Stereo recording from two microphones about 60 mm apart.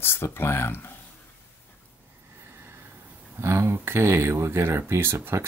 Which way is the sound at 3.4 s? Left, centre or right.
Right.